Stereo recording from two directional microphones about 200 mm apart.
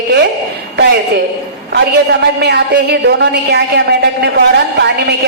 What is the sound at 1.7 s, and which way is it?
A man's voice, 60° right (ahead or behind).